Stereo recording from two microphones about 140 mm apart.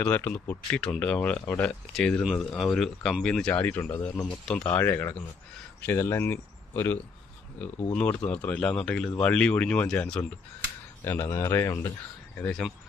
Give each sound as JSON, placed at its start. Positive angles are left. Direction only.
{"t": 0.0, "sound": "speech", "side_deg": 15}
{"t": 8.3, "sound": "speech", "side_deg": 10}
{"t": 12.4, "sound": "speech", "side_deg": 5}